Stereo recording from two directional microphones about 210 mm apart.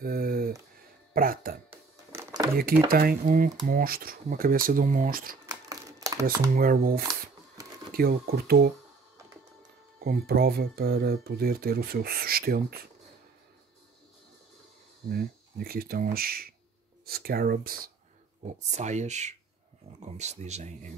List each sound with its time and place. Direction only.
0.0 s a sound: 45° right (ahead or behind)
1.1 s speech: 45° right (ahead or behind)
1.7 s music: 15° right (ahead or behind)
2.9 s speech: 45° right (ahead or behind)
5.5 s a sound: 15° right (ahead or behind)
6.5 s speech: 45° right (ahead or behind)
9.9 s speech: 45° right (ahead or behind)
15.0 s speech: 45° right (ahead or behind)
18.4 s speech: 35° right (ahead or behind)